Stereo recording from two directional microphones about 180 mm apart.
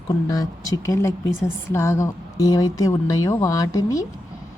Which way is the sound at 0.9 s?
15° left (ahead or behind).